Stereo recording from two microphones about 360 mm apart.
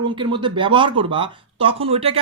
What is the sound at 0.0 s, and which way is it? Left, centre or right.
Speech, centre.